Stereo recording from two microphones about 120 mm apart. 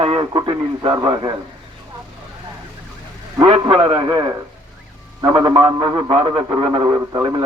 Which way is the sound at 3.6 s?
50° right (ahead or behind).